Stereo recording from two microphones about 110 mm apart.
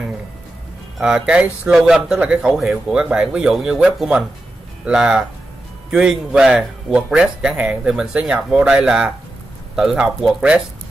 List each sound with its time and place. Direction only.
0.9 s speech: 5° right (ahead or behind)